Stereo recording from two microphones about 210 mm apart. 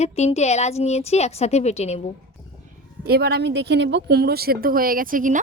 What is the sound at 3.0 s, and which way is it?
Speech, 50° right (ahead or behind).